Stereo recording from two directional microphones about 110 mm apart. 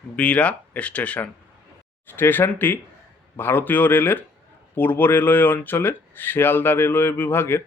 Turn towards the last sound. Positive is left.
turn(degrees=20)  # may be behind; listen again after turning